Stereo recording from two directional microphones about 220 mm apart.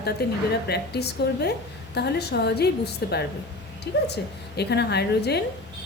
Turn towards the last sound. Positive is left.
turn(degrees=50)  # may be behind; listen again after turning